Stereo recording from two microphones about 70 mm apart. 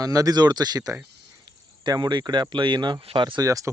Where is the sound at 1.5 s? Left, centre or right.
Right.